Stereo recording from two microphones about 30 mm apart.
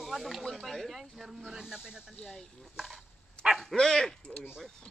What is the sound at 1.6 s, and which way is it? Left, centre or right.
Speech, centre.